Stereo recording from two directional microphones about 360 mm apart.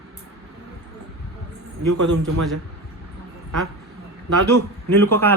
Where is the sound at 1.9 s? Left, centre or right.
Right.